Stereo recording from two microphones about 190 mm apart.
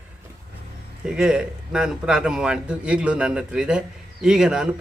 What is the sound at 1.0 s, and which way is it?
A man's voice, 5° right (ahead or behind).